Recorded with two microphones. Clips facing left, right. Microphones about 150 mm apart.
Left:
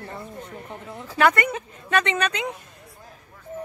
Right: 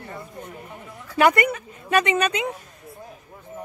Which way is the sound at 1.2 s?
10° right (ahead or behind).